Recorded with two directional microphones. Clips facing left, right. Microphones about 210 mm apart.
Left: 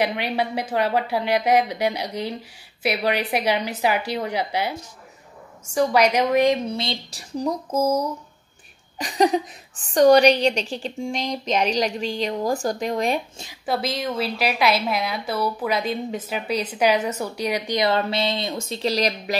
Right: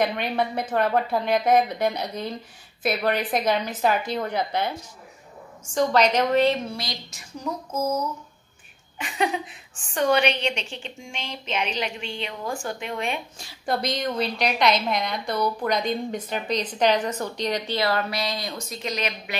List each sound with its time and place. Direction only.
0.0 s a woman's voice: 10° left (ahead or behind)
5.8 s a woman's voice: 10° left (ahead or behind)
6.8 s a woman's voice: 30° left (ahead or behind)
8.9 s a woman's voice: 35° left (ahead or behind)
13.7 s a woman's voice: 5° left (ahead or behind); by 19.3 s 35° left (ahead or behind)